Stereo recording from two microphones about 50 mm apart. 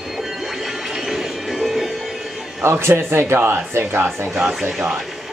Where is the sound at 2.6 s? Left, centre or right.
Right.